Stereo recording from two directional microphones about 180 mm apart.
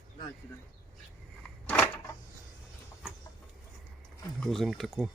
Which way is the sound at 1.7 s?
5° left (ahead or behind).